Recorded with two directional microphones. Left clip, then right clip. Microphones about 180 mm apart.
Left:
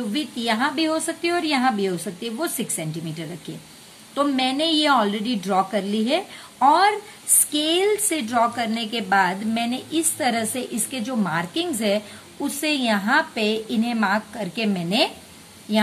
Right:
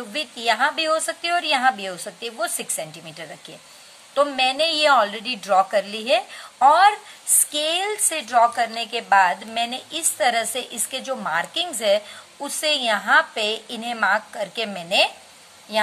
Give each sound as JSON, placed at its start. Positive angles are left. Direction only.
{"t": 0.1, "sound": "a woman's voice", "side_deg": -20}